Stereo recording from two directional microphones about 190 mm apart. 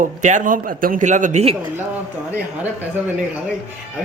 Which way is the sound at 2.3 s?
10° right (ahead or behind).